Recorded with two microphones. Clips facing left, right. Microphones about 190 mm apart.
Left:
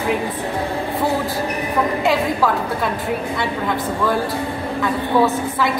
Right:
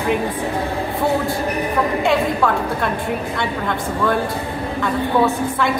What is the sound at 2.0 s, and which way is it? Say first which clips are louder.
A woman's voice: right 1 dB; 5° left (ahead or behind).